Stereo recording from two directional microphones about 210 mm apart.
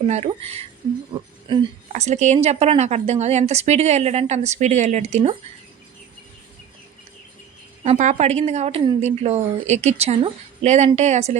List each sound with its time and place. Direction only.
0.0 s a woman's voice: 30° right (ahead or behind)
7.9 s a woman's voice: 35° right (ahead or behind)